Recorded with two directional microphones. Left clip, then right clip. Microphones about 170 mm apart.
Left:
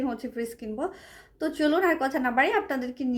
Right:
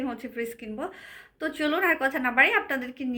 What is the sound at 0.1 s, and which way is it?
Speech, 20° left (ahead or behind).